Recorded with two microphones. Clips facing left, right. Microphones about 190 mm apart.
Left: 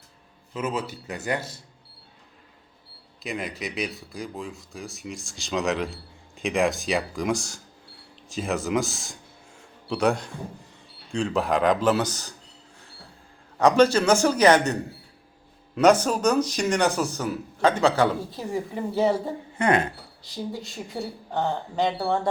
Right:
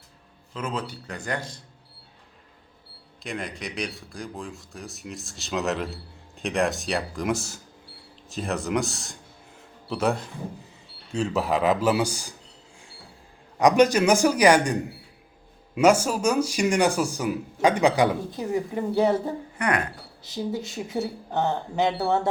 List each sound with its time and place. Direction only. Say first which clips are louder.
0.5 s speech: left 2 dB; 5° left (ahead or behind)
3.2 s speech: left 2 dB; 5° left (ahead or behind)
9.6 s a sound: left 2 dB; centre (ahead or behind)
11.1 s speech: left 1 dB; 5° right (ahead or behind)
13.6 s speech: even; 15° right (ahead or behind)
18.5 s speech: right 2 dB; centre (ahead or behind)
19.5 s speech: left 5 dB; 25° left (ahead or behind)
20.5 s speech: right 4 dB; centre (ahead or behind)